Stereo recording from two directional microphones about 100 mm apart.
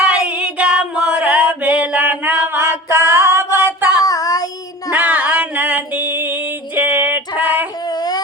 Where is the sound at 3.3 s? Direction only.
25° right (ahead or behind).